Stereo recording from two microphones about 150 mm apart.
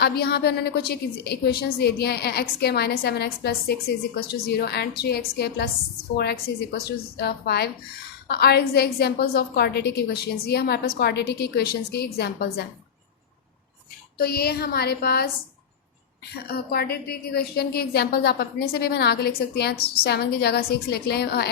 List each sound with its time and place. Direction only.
0.0 s a woman's voice: 90° left
14.2 s a woman's voice: 90° left
16.3 s a woman's voice: 90° left